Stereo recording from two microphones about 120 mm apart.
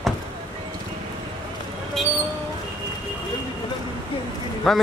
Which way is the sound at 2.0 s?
5° left (ahead or behind).